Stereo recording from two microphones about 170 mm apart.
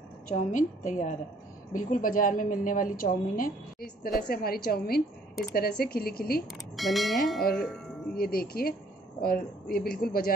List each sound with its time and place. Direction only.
0.3 s a woman's voice: 50° left (ahead or behind)
6.8 s speech: centre (ahead or behind)
8.2 s speech: 60° left (ahead or behind)